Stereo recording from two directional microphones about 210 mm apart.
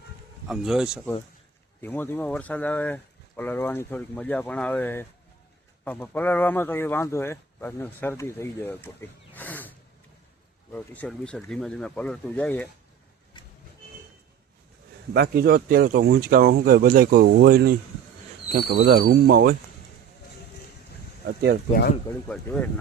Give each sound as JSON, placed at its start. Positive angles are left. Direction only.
{"t": 0.4, "sound": "speech", "side_deg": 0}
{"t": 1.8, "sound": "speech", "side_deg": 10}
{"t": 15.1, "sound": "speech", "side_deg": -50}
{"t": 21.7, "sound": "speech", "side_deg": 45}
{"t": 22.3, "sound": "speech", "side_deg": 10}